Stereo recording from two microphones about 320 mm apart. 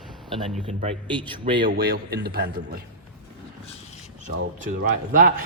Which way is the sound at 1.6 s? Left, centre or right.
Right.